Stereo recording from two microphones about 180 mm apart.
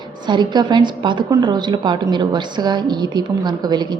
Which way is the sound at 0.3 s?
25° right (ahead or behind).